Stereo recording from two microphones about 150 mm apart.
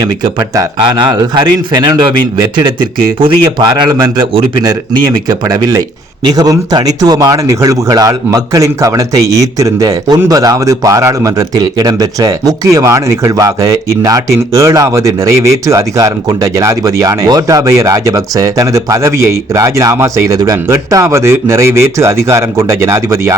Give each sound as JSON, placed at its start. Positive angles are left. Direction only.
{"t": 0.0, "sound": "speech", "side_deg": -25}
{"t": 3.8, "sound": "speech", "side_deg": -25}